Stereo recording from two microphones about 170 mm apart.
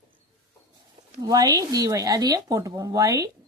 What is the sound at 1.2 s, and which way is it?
Speech, 20° right (ahead or behind).